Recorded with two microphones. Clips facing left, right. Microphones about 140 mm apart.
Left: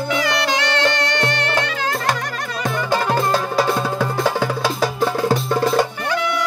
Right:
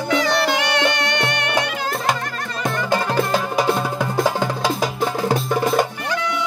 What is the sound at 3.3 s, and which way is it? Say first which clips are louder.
Music: left 1 dB; 15° right (ahead or behind).